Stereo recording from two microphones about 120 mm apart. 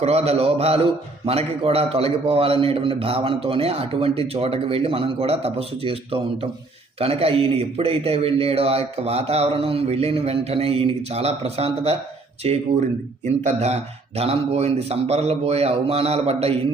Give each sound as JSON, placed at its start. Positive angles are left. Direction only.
{"t": 0.0, "sound": "a man's voice", "side_deg": -60}